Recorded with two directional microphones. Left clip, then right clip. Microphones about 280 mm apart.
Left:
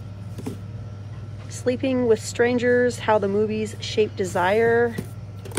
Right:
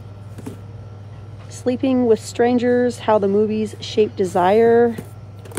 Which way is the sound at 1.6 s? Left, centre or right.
Centre.